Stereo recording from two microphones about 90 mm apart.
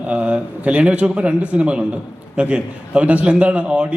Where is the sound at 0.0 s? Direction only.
15° right (ahead or behind).